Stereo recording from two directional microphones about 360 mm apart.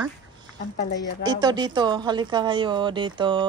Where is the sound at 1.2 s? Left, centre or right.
Centre.